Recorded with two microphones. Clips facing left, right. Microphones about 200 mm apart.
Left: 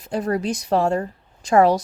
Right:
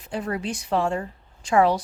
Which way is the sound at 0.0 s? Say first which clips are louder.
Left 5 dB; 40° left (ahead or behind).